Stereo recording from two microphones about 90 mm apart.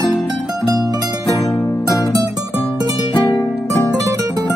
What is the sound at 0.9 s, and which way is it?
Music, 45° right (ahead or behind).